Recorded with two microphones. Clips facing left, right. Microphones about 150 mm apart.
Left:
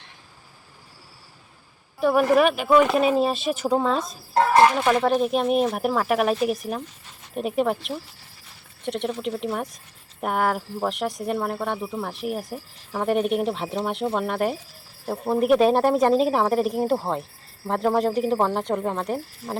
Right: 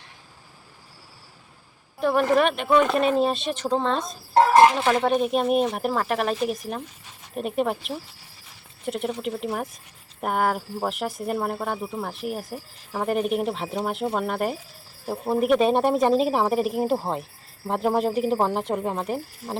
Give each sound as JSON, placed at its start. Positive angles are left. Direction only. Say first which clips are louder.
{"t": 2.0, "sound": "speech", "louder": "left 2 dB", "side_deg": 5}
{"t": 4.4, "sound": "a sound", "louder": "right 2 dB", "side_deg": -20}
{"t": 4.8, "sound": "speech", "louder": "left 1 dB", "side_deg": 0}